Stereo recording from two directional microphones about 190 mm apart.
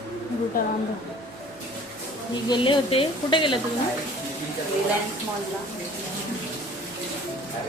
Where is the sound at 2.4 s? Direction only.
25° left (ahead or behind).